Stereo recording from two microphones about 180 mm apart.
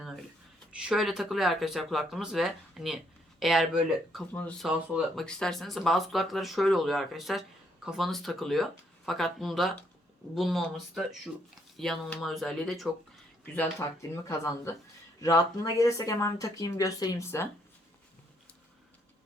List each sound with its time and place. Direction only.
0.8 s speech: 5° right (ahead or behind); by 17.5 s 15° left (ahead or behind)